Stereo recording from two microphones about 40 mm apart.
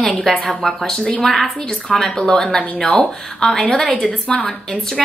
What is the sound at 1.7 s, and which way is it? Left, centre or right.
Speech, left.